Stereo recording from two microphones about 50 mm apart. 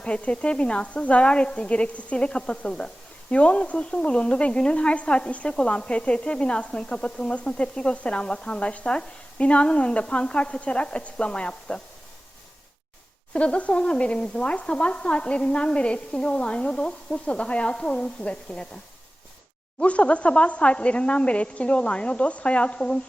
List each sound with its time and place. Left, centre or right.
0.0 s a woman's voice: left
13.3 s a woman's voice: left
19.8 s a woman's voice: left